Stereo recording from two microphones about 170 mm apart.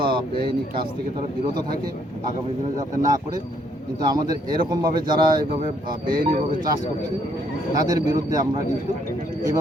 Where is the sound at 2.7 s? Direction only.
20° right (ahead or behind).